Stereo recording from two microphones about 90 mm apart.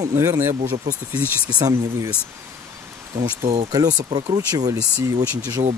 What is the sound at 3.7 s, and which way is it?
Speech, 45° right (ahead or behind).